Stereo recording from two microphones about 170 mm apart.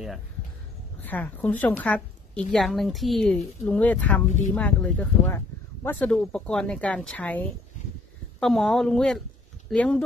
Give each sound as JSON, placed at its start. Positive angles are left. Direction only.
{"t": 1.0, "sound": "a woman's voice", "side_deg": 10}